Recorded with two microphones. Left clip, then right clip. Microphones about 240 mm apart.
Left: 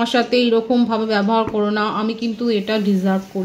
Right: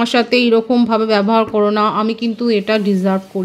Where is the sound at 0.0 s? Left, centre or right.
Right.